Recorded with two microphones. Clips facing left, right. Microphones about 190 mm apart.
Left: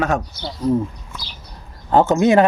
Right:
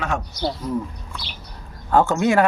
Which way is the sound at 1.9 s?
20° left (ahead or behind).